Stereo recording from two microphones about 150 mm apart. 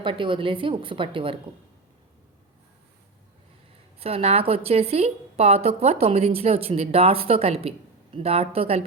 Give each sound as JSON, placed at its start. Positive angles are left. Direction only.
{"t": 0.0, "sound": "a woman's voice", "side_deg": -35}
{"t": 4.0, "sound": "a woman's voice", "side_deg": -40}